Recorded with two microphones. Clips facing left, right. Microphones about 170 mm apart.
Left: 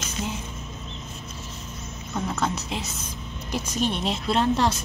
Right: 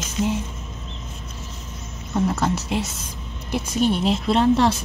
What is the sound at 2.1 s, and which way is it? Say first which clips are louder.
Speech: right 6 dB; 5° right (ahead or behind).